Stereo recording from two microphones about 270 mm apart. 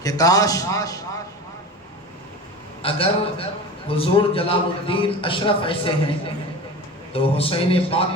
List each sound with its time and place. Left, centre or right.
0.0 s a man's voice: centre
2.8 s a man's voice: centre
7.1 s a man's voice: left